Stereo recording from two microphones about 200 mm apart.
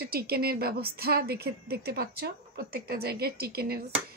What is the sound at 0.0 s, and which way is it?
A woman's voice, 50° right (ahead or behind).